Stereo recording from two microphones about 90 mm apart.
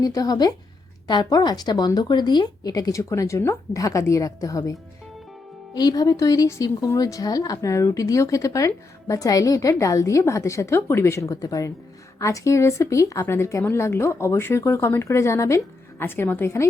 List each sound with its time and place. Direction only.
0.0 s speech: 45° left (ahead or behind); by 16.6 s 25° left (ahead or behind)